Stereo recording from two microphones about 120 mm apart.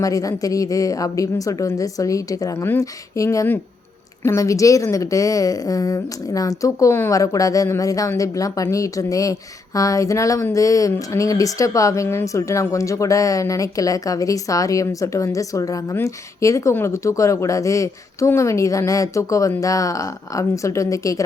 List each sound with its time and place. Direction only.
0.0 s speech: 30° left (ahead or behind)